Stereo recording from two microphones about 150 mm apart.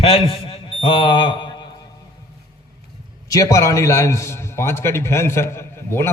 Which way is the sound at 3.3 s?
20° left (ahead or behind).